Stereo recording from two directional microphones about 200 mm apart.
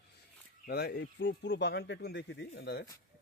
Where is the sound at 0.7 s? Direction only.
50° left (ahead or behind).